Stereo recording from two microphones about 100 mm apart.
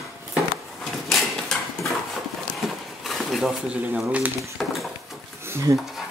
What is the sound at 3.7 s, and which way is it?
Speech, 10° right (ahead or behind).